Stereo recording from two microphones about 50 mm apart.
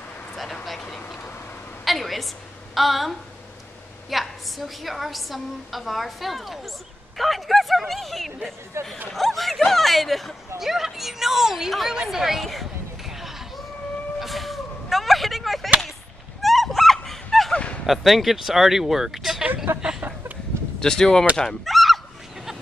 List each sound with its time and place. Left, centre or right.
1.9 s a woman's voice: centre
8.8 s speech: right
9.1 s a woman's voice: centre
12.1 s a sound: centre
14.2 s vehicle: centre
16.3 s a sound: centre
17.8 s a woman's voice: centre
19.4 s a sound: right
20.8 s speech: centre
21.4 s fowl: centre